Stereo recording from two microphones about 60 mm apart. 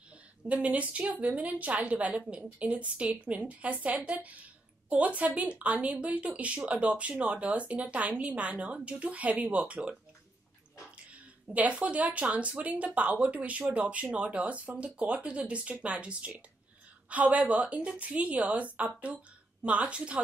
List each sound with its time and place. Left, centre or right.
0.5 s a woman's voice: right
11.1 s a woman's voice: right